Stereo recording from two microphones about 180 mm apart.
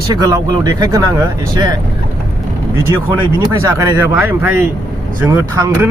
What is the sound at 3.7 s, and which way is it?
Speech, 15° right (ahead or behind).